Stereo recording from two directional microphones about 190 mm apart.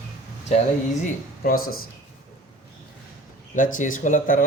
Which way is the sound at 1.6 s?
90° left.